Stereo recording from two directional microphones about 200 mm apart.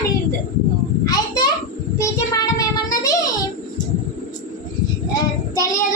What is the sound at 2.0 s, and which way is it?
Child singing, 15° left (ahead or behind).